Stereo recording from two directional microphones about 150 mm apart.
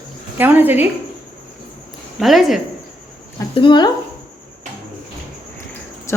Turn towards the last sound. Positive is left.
turn(degrees=20)  # may be behind; listen again after turning